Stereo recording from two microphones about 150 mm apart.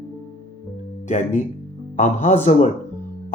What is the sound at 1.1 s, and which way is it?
Speech, 55° left (ahead or behind).